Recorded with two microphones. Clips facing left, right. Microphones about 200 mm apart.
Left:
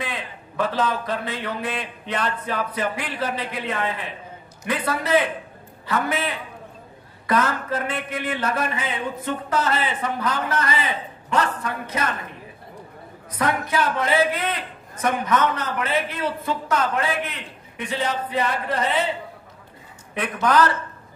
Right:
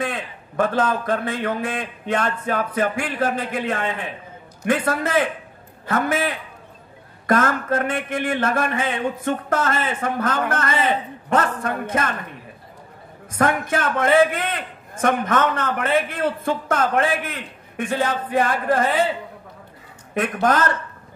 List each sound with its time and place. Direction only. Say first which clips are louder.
0.0 s speech: right 4 dB; 50° right (ahead or behind)
13.3 s speech: right 3 dB; 50° right (ahead or behind)
20.2 s speech: even; 45° right (ahead or behind)